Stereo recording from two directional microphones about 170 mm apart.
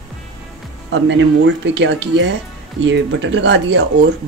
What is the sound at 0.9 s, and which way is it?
Speech, 90° right.